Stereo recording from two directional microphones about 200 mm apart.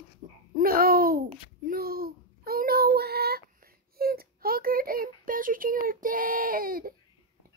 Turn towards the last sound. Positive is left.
turn(degrees=-45)  # may be behind; listen again after turning